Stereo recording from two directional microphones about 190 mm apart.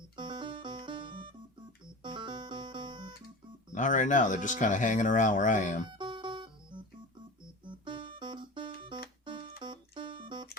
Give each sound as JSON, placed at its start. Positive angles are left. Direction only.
{"t": 0.2, "sound": "music", "side_deg": -25}
{"t": 3.7, "sound": "speech", "side_deg": 40}
{"t": 5.9, "sound": "music", "side_deg": -25}
{"t": 7.9, "sound": "music", "side_deg": -25}